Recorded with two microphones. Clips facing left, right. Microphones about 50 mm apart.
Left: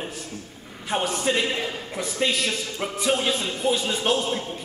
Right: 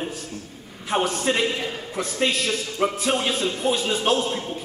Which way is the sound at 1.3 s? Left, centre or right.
Centre.